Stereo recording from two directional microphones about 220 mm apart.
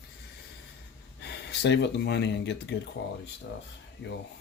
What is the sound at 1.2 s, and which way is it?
Speech, 50° left (ahead or behind).